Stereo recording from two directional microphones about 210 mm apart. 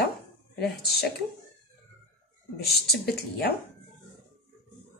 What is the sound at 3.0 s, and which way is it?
Speech, 50° left (ahead or behind).